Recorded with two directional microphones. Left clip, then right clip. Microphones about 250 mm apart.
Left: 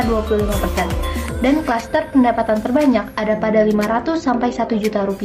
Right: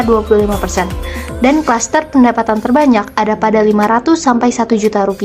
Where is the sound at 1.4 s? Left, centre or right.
Right.